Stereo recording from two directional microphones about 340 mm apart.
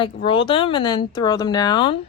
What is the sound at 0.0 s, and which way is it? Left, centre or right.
Speech, centre.